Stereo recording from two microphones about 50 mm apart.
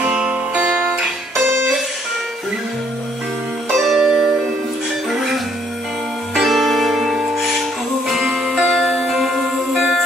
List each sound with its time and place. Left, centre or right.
0.0 s music: right
3.7 s music: centre
6.3 s music: centre